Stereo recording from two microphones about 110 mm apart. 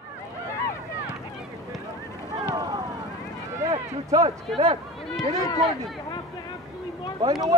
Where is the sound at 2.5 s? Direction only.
40° right (ahead or behind).